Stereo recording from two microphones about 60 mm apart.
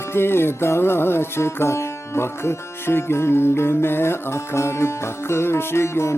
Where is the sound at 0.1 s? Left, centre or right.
Left.